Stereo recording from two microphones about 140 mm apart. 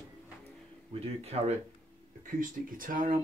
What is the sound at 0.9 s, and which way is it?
Speech, 45° right (ahead or behind).